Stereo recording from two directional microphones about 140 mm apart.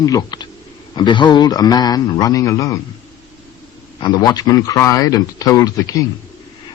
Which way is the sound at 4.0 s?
30° left (ahead or behind).